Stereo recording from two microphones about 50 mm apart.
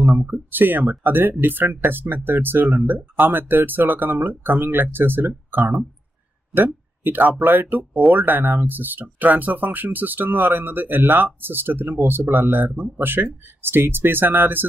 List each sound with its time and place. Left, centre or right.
0.3 s speech: right